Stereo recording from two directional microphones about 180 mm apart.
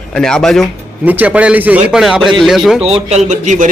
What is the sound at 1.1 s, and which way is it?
A man's voice, 10° right (ahead or behind).